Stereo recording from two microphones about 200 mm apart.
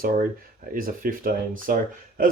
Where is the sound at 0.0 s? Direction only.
45° right (ahead or behind).